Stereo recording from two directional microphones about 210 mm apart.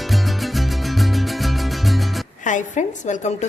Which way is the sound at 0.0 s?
Centre (ahead or behind).